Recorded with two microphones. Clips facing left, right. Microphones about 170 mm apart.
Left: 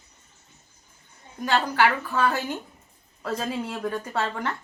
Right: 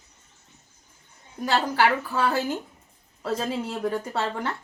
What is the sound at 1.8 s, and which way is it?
A woman's voice, 30° right (ahead or behind).